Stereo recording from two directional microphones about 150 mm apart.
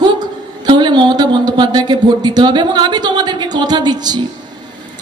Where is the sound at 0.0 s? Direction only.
30° right (ahead or behind).